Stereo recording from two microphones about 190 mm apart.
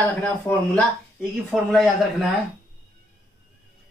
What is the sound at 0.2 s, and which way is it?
Speech, 10° left (ahead or behind).